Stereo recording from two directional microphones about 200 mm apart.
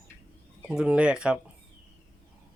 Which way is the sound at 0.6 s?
5° right (ahead or behind).